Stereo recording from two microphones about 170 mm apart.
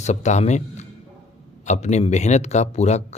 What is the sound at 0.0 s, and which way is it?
Speech, 45° left (ahead or behind).